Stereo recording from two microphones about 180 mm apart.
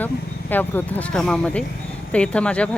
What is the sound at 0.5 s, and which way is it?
Speech, 10° left (ahead or behind).